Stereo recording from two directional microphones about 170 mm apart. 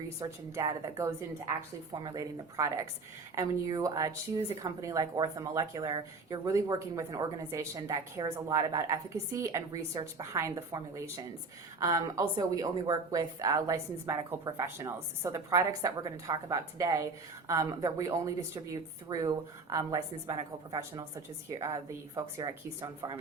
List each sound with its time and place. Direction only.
0.2 s a woman's voice: 20° right (ahead or behind)